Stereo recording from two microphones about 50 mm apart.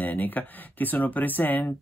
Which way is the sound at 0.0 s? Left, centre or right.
Left.